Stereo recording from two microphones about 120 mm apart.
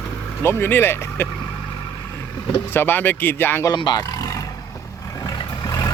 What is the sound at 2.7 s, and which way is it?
Speech, 15° left (ahead or behind).